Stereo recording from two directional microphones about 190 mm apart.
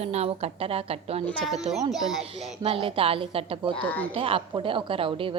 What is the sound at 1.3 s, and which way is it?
Speech, 5° left (ahead or behind).